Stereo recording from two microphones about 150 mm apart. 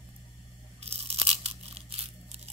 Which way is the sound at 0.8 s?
40° right (ahead or behind).